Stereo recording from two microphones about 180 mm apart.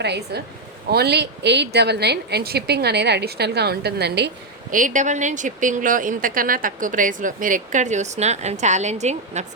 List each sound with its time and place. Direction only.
0.0 s a woman's voice: 65° right (ahead or behind)
4.7 s a woman's voice: 45° right (ahead or behind)